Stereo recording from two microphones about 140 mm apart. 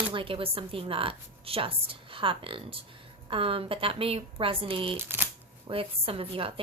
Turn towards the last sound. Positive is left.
turn(degrees=-40)  # may be behind; listen again after turning